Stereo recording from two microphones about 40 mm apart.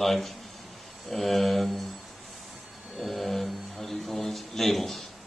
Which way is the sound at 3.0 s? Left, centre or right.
Centre.